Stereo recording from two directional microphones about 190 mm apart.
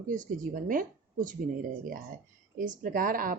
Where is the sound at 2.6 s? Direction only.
45° right (ahead or behind).